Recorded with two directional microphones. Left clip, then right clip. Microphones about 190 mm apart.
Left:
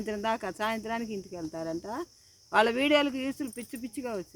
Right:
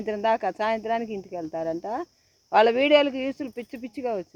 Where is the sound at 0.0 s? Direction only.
20° left (ahead or behind).